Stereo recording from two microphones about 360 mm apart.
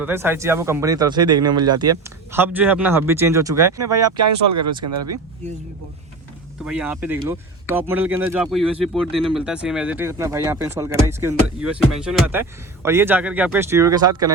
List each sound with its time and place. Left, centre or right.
0.0 s speech: centre
4.2 s speech: right
6.7 s speech: centre